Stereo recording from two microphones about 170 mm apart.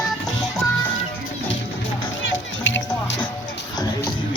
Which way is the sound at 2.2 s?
90° left.